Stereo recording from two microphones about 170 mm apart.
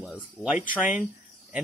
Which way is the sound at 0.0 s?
5° right (ahead or behind).